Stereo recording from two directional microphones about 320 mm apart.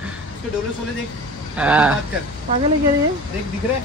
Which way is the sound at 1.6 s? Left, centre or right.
Centre.